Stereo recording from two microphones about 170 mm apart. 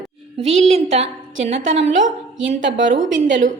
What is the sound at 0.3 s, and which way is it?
A woman's voice, 40° right (ahead or behind).